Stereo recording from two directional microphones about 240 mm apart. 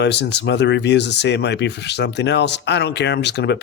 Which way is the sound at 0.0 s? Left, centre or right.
Left.